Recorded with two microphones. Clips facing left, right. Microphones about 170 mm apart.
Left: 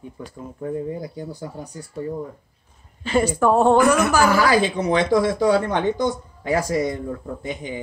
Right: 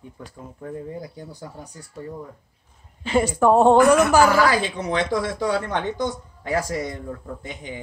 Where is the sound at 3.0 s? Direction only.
20° right (ahead or behind).